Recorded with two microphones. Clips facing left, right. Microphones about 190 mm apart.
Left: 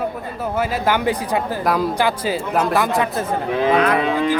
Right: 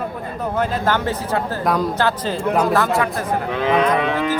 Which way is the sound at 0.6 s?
10° left (ahead or behind).